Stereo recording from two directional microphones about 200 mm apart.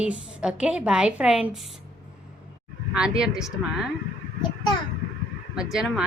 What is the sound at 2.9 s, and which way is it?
Speech, 5° right (ahead or behind).